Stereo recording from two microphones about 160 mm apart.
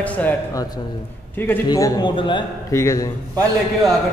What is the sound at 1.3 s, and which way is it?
Speech, 10° left (ahead or behind).